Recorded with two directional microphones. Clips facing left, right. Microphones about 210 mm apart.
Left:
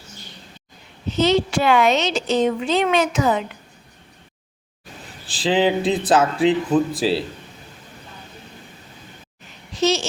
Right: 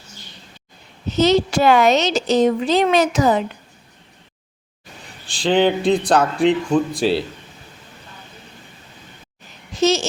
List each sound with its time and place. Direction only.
1.1 s a woman's voice: 40° right (ahead or behind)
5.2 s speech: centre (ahead or behind)
9.8 s babbling: 45° right (ahead or behind)